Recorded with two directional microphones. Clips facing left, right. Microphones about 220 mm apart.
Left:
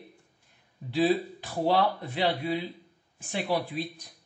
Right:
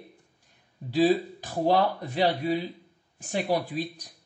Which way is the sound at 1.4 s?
40° right (ahead or behind).